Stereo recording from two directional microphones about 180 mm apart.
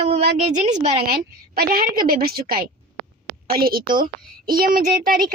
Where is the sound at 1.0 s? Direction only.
55° right (ahead or behind).